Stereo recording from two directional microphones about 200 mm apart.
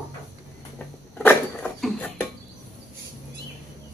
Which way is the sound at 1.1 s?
5° left (ahead or behind).